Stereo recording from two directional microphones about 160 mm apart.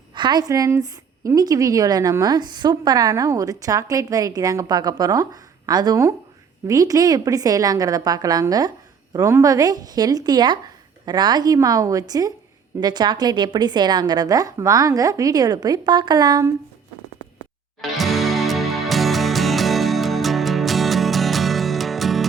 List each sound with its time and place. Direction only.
0.1 s a woman's voice: 30° right (ahead or behind)
17.7 s music: centre (ahead or behind)